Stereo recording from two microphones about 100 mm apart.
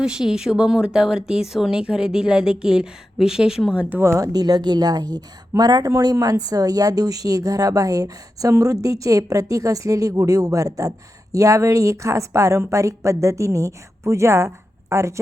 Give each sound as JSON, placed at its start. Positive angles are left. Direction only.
{"t": 0.0, "sound": "speech", "side_deg": -5}
{"t": 4.3, "sound": "a woman's voice", "side_deg": -40}